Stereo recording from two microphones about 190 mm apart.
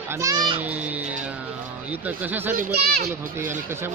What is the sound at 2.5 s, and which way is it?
Speech, 50° right (ahead or behind).